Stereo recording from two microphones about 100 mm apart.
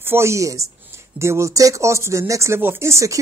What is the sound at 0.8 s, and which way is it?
Speech, 25° right (ahead or behind).